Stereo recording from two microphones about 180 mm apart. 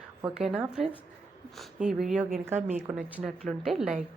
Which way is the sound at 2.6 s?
40° right (ahead or behind).